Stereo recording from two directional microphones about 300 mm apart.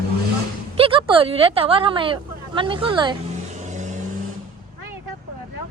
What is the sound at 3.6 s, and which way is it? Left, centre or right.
Vehicle, right.